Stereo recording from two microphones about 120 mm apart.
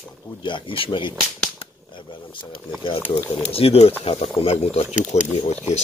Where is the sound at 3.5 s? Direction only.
55° left (ahead or behind).